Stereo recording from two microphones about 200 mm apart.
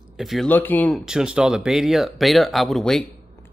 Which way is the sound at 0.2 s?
Centre (ahead or behind).